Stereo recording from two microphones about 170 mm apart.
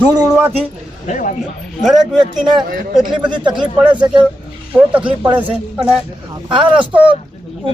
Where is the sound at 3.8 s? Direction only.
10° right (ahead or behind).